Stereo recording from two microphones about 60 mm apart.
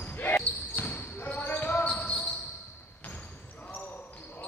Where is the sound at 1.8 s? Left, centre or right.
Centre.